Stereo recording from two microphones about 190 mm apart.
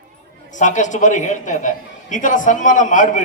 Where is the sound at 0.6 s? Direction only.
40° left (ahead or behind).